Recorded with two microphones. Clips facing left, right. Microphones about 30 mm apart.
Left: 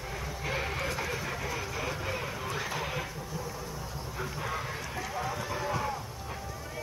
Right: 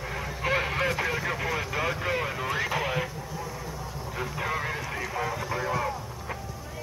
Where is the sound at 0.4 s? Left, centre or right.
Right.